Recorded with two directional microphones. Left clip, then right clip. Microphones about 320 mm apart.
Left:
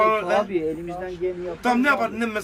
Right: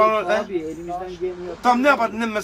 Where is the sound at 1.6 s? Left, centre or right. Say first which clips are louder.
Right 4 dB; centre.